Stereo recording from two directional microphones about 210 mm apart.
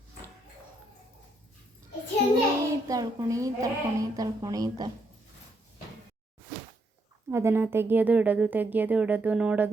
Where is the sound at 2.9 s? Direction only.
15° right (ahead or behind).